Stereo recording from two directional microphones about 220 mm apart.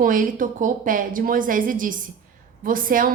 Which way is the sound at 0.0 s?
35° right (ahead or behind).